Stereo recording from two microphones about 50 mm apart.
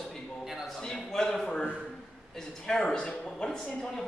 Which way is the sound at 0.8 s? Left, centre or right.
Centre.